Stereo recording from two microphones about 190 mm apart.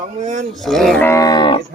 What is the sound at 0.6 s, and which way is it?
Speech, centre (ahead or behind).